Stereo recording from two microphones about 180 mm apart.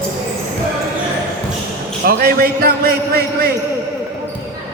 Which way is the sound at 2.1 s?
55° right (ahead or behind).